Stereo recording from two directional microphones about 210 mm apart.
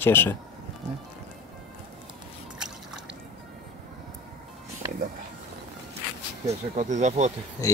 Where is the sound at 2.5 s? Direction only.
5° right (ahead or behind).